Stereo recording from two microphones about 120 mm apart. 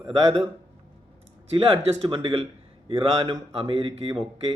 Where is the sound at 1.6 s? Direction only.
50° right (ahead or behind).